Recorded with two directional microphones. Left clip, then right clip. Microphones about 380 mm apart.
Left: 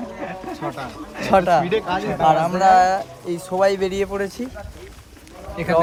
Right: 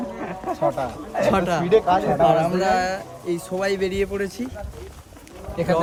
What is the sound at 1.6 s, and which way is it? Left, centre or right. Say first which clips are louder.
Speech: right 4 dB; right.